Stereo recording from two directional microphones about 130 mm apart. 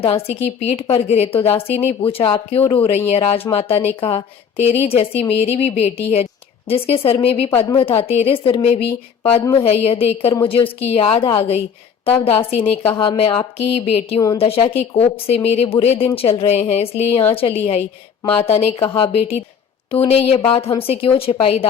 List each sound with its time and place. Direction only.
0.0 s a woman's voice: 50° left (ahead or behind)
3.1 s a woman's voice: 50° left (ahead or behind)